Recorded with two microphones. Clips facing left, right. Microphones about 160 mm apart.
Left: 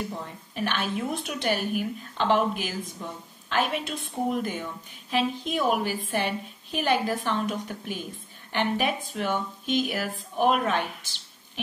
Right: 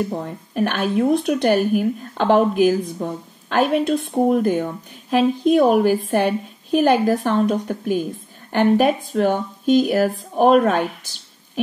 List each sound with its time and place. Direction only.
0.0 s speech: 55° right (ahead or behind)